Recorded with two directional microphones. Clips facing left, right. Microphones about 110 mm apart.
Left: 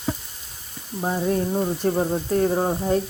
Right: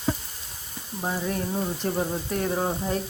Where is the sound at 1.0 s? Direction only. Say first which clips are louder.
Left 6 dB; 20° left (ahead or behind).